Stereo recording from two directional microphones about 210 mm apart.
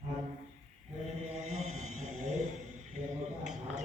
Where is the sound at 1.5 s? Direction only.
30° right (ahead or behind).